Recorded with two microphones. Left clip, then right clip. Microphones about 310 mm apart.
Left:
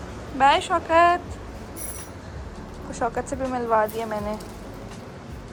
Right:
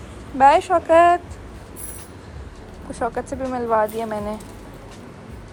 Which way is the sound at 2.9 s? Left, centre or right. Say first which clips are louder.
Right 1 dB; centre.